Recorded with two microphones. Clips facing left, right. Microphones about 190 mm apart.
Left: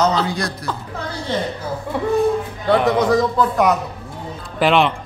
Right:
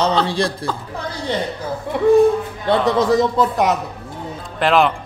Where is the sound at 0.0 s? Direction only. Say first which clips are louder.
Right 1 dB; 30° right (ahead or behind).